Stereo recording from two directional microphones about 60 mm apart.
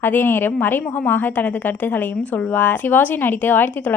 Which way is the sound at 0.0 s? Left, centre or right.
Left.